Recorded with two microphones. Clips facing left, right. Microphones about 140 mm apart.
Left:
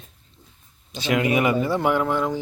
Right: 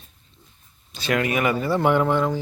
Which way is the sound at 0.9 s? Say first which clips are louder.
Left 2 dB; 15° left (ahead or behind).